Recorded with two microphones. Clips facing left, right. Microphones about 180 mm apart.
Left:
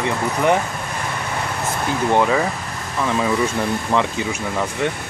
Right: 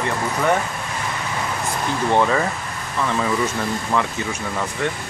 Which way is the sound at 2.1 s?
10° left (ahead or behind).